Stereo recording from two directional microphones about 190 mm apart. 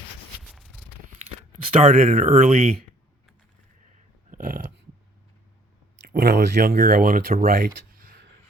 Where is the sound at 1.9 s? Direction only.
40° right (ahead or behind).